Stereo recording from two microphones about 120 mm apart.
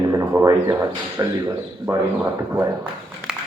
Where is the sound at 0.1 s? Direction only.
25° right (ahead or behind).